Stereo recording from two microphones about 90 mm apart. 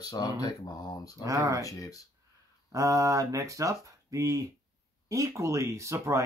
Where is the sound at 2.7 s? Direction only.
35° right (ahead or behind).